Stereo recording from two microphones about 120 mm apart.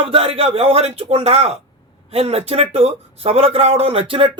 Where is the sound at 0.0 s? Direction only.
50° right (ahead or behind).